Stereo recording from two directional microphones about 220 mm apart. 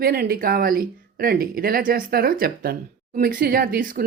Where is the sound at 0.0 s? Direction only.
45° right (ahead or behind).